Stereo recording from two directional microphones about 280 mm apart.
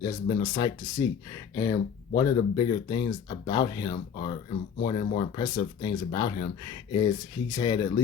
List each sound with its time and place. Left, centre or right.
0.0 s speech: centre